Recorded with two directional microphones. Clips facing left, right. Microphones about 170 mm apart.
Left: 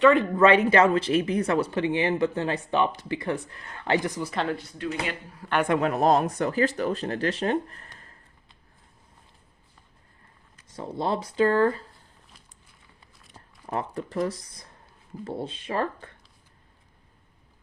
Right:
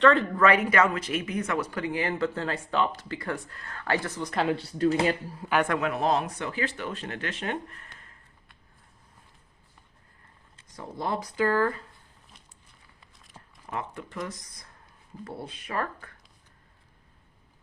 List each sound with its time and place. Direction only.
0.0 s speech: 15° left (ahead or behind)
4.2 s speech: 5° left (ahead or behind)
4.5 s speech: 35° right (ahead or behind)
5.8 s speech: 40° left (ahead or behind)
10.8 s speech: 25° left (ahead or behind)
13.3 s speech: 35° left (ahead or behind)